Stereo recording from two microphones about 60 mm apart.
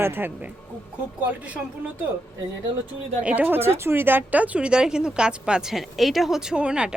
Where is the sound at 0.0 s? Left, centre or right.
Right.